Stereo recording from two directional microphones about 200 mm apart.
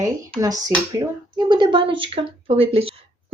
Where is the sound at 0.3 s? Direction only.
20° right (ahead or behind).